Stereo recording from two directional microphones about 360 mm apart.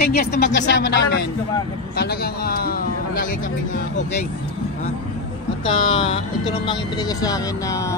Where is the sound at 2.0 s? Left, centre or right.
Left.